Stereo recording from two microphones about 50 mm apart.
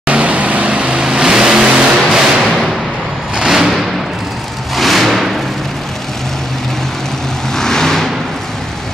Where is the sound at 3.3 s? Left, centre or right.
Centre.